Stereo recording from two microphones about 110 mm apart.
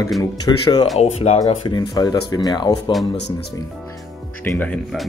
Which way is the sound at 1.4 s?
35° left (ahead or behind).